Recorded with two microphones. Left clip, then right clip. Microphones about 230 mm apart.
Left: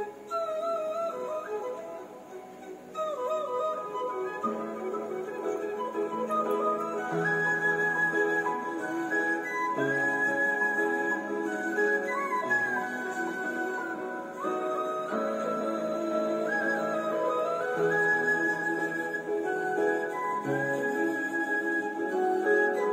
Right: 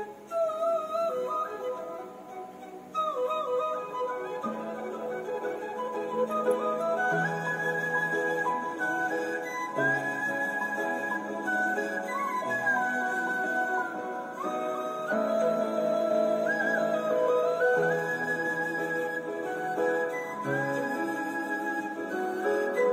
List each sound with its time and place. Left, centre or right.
20.4 s music: right